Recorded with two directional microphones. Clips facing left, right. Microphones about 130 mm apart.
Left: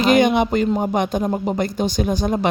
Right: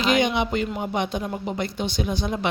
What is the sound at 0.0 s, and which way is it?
Speech, 50° left (ahead or behind).